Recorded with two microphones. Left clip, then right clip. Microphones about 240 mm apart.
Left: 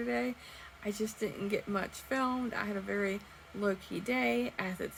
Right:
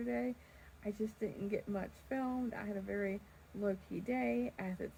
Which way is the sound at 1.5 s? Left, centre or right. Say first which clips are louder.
Left 6 dB; centre.